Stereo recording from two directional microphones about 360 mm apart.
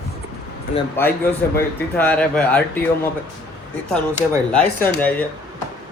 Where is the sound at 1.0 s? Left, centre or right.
Centre.